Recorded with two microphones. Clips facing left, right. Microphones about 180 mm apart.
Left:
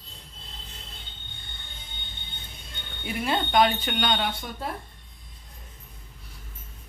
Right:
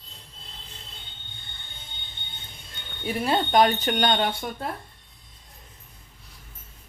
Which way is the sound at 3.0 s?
40° right (ahead or behind).